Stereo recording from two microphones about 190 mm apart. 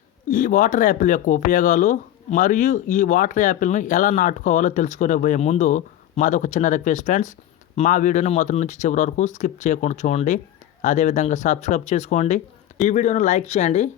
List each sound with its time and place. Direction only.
0.3 s speech: 45° left (ahead or behind)